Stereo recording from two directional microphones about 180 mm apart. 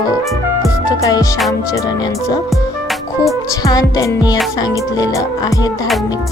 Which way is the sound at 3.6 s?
20° left (ahead or behind).